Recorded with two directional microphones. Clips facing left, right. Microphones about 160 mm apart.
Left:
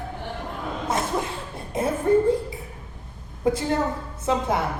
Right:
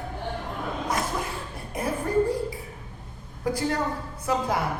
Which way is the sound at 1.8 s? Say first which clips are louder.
Left 5 dB; 25° left (ahead or behind).